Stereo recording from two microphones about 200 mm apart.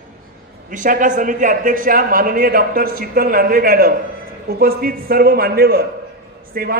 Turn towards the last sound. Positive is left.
turn(degrees=-50)  # may be behind; listen again after turning